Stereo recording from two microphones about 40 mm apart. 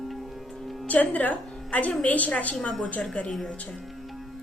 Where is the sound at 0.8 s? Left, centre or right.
Left.